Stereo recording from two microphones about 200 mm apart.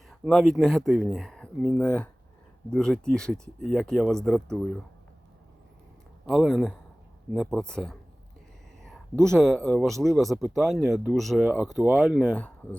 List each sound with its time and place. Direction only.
0.1 s speech: centre (ahead or behind)
6.2 s speech: centre (ahead or behind)
10.2 s speech: 10° right (ahead or behind)